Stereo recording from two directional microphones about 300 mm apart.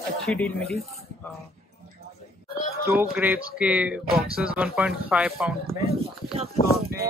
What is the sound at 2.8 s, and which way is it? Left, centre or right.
Speech, centre.